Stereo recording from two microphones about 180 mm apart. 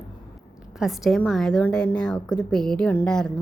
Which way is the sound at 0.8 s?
Centre (ahead or behind).